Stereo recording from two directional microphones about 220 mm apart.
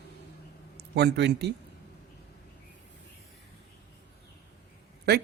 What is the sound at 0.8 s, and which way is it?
Speech, 50° right (ahead or behind).